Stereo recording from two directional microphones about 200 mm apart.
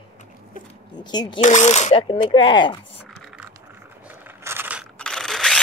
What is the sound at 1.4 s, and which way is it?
Speech, 35° left (ahead or behind).